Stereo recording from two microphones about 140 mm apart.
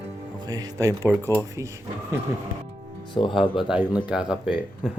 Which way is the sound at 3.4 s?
35° left (ahead or behind).